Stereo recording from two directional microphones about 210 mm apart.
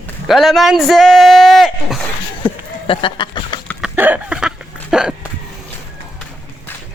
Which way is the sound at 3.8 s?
5° right (ahead or behind).